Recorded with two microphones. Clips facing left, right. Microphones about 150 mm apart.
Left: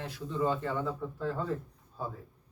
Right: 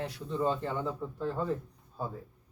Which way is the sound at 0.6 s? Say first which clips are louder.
Even; 25° right (ahead or behind).